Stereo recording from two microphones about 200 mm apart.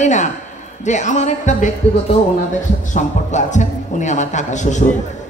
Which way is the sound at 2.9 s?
35° left (ahead or behind).